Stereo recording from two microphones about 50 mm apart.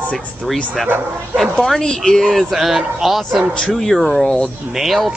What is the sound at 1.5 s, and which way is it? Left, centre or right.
Speech, centre.